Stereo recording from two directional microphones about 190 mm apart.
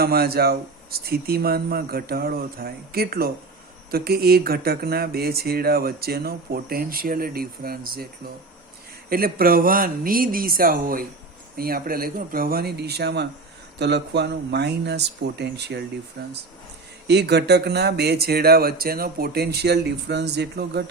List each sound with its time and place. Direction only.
0.0 s speech: 55° right (ahead or behind)
9.0 s speech: 50° right (ahead or behind)